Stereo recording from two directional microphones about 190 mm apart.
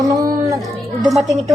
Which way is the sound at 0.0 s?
20° right (ahead or behind).